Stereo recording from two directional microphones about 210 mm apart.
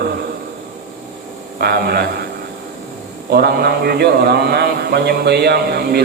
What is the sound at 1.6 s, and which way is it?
Speech, 50° right (ahead or behind).